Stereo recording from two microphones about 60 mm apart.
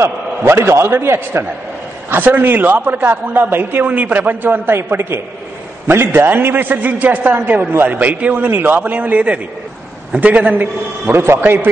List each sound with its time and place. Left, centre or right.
0.5 s a man's voice: right
3.8 s a man's voice: right
11.1 s a man's voice: right